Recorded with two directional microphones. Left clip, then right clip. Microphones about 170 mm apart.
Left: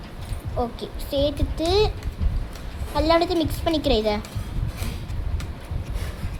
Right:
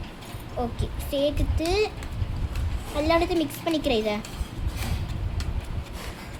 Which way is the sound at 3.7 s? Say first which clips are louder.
Left 3 dB; centre (ahead or behind).